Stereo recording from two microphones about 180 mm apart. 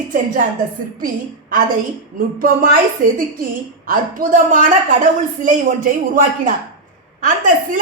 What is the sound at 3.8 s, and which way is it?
Speech, 50° right (ahead or behind).